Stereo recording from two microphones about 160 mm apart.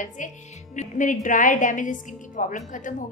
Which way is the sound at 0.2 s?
55° left (ahead or behind).